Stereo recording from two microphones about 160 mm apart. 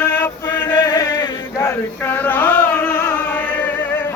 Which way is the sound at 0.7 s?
25° left (ahead or behind).